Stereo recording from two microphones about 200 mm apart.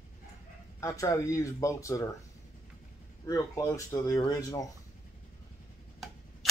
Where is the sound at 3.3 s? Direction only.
15° left (ahead or behind).